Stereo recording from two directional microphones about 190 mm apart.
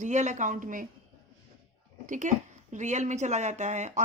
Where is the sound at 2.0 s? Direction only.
40° right (ahead or behind).